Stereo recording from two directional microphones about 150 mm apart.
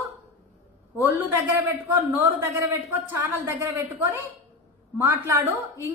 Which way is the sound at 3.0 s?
15° right (ahead or behind).